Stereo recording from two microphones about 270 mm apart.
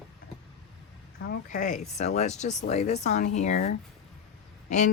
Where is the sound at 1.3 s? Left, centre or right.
Left.